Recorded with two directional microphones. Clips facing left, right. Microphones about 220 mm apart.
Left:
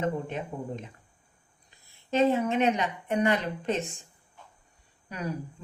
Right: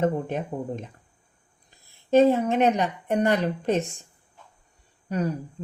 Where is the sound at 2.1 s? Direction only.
40° right (ahead or behind).